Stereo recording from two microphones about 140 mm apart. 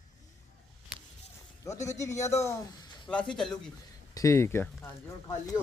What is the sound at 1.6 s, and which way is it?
Speech, 20° left (ahead or behind).